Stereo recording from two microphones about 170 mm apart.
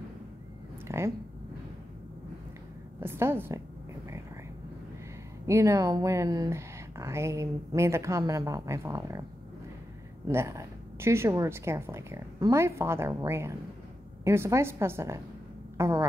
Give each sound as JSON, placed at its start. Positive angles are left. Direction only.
{"t": 0.8, "sound": "speech", "side_deg": -15}
{"t": 3.0, "sound": "speech", "side_deg": -15}
{"t": 5.5, "sound": "speech", "side_deg": -20}
{"t": 10.2, "sound": "speech", "side_deg": -15}